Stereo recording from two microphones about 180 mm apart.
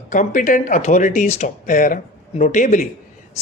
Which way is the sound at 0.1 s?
45° left (ahead or behind).